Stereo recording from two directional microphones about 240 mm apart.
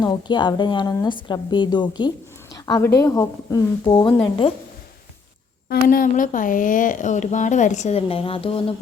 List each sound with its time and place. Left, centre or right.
0.0 s a woman's voice: centre
5.6 s a woman's voice: left